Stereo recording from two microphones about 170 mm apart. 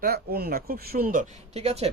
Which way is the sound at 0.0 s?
65° right (ahead or behind).